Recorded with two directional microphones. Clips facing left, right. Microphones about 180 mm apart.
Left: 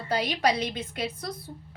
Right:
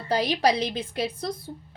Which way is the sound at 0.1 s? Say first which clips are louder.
Right 3 dB; 35° right (ahead or behind).